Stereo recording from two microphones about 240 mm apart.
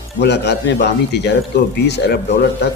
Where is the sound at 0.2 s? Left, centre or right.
Left.